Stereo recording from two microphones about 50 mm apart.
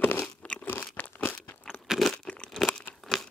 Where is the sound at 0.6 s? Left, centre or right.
Left.